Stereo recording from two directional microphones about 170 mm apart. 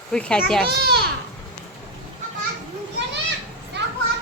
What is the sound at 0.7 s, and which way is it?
Speech, 75° right (ahead or behind).